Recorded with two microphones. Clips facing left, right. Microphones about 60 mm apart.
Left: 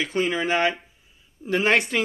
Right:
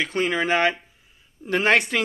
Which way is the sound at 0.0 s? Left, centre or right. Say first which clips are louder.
Right 1 dB; right.